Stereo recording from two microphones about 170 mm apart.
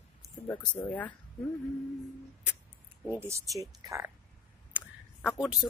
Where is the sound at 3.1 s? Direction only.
15° right (ahead or behind).